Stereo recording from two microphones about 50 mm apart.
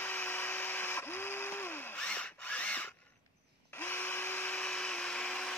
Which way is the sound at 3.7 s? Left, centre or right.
Left.